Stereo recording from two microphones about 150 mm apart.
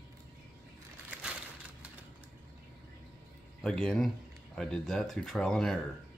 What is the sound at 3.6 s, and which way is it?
Speech, 5° left (ahead or behind).